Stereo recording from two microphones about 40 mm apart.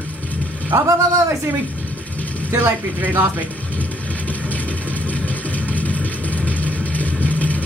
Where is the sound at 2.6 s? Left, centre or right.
Right.